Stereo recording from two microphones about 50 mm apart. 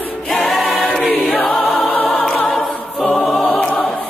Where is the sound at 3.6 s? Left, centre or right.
Centre.